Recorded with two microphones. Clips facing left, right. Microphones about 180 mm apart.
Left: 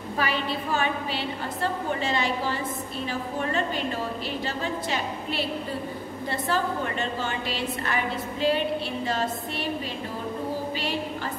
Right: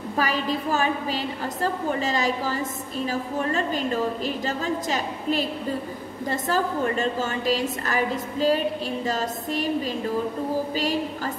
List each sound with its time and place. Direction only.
0.2 s a woman's voice: 40° right (ahead or behind)